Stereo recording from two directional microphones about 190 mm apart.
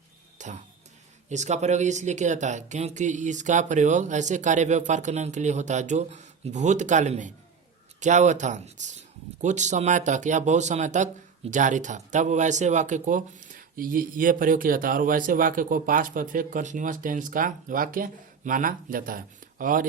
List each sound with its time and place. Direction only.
0.3 s music: 40° right (ahead or behind)
1.3 s speech: 40° right (ahead or behind)